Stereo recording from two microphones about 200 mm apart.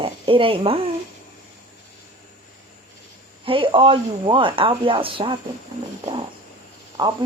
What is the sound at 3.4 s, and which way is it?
Speech, 25° right (ahead or behind).